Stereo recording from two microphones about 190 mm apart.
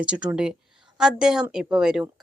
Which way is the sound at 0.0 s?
5° right (ahead or behind).